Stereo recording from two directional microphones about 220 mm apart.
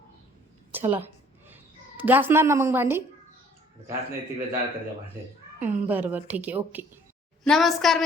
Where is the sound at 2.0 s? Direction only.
10° right (ahead or behind).